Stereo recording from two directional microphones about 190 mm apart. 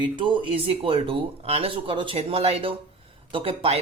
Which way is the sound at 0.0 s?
25° right (ahead or behind).